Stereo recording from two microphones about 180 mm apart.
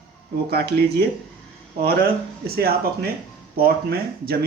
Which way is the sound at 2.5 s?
60° right (ahead or behind).